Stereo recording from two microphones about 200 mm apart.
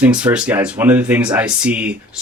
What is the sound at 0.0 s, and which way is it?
Speech, 5° right (ahead or behind).